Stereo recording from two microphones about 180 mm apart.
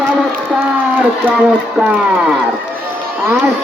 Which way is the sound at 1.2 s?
10° right (ahead or behind).